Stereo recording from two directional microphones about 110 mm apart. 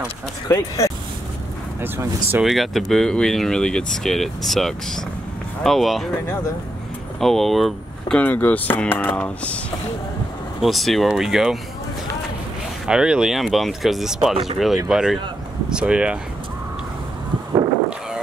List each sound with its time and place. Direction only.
0.5 s speech: 30° left (ahead or behind)
1.8 s speech: 20° right (ahead or behind)
2.4 s speech: centre (ahead or behind)
7.2 s speech: centre (ahead or behind)
8.2 s speech: 15° left (ahead or behind)
10.6 s speech: centre (ahead or behind)
12.8 s speech: 5° right (ahead or behind)